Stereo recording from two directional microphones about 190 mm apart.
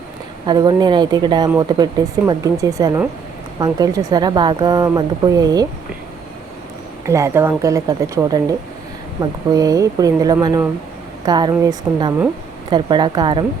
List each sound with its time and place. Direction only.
0.4 s speech: 20° right (ahead or behind)
7.0 s speech: 15° right (ahead or behind)